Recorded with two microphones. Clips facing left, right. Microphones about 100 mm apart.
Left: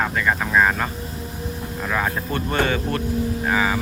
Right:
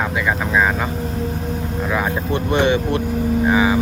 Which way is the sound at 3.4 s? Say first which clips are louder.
Right 6 dB; 15° right (ahead or behind).